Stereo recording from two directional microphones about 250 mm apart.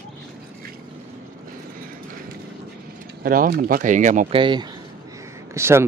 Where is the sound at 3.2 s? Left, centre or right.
Right; by 5.8 s centre.